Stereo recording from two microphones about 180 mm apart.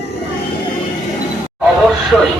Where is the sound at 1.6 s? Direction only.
Centre (ahead or behind).